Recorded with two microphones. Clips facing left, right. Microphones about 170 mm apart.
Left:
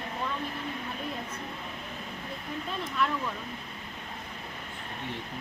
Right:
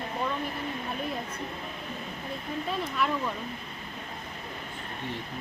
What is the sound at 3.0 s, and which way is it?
Speech, 5° right (ahead or behind).